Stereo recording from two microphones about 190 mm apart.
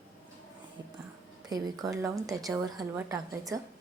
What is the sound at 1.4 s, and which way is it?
A woman's voice, 20° right (ahead or behind).